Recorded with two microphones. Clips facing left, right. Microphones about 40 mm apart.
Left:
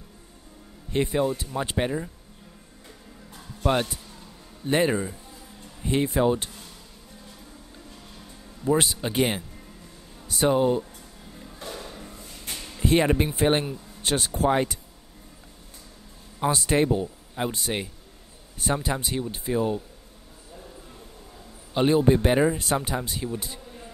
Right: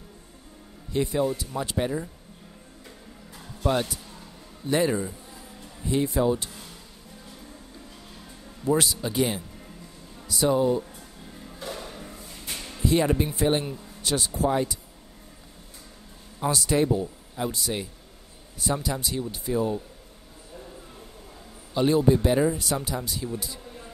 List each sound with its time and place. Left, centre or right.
0.9 s speech: left
3.6 s speech: left
8.7 s speech: left
11.4 s music: centre
12.5 s a sound: centre
12.8 s speech: left
16.3 s speech: left
21.7 s speech: left